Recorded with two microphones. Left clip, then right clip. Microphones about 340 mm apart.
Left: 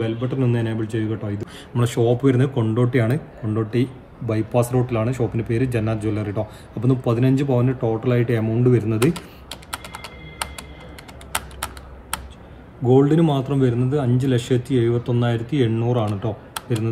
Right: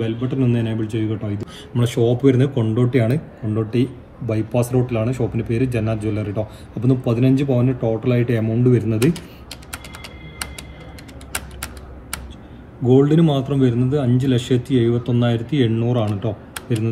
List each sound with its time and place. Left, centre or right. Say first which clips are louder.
0.0 s a man's voice: right 1 dB; centre
12.8 s a man's voice: right 1 dB; centre